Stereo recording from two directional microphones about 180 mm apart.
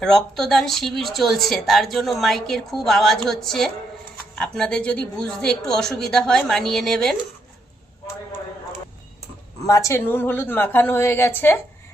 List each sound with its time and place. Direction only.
0.0 s speech: centre (ahead or behind)
9.6 s a woman's voice: 20° left (ahead or behind)